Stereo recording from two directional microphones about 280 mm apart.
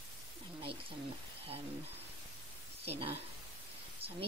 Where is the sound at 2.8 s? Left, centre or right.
Right.